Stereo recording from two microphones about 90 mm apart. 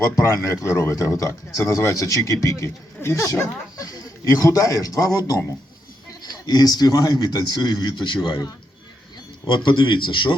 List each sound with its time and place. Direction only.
0.0 s speech: 35° left (ahead or behind)
6.2 s a man's voice: 50° left (ahead or behind)
9.6 s a man's voice: 65° left (ahead or behind)